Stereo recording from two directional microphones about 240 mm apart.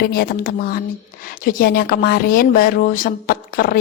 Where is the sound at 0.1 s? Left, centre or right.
Left.